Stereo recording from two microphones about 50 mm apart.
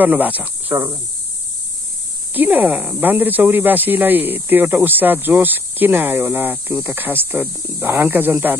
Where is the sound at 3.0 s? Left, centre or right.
Right.